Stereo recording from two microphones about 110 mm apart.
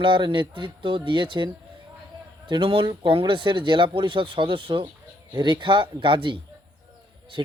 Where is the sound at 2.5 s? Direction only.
50° right (ahead or behind).